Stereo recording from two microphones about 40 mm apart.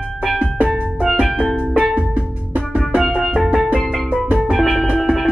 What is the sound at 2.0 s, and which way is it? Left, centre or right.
Music, right.